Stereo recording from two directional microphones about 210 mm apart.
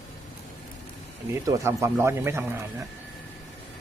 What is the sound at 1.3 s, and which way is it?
Speech, 15° right (ahead or behind).